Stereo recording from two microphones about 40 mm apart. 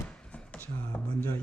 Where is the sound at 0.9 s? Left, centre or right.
Left.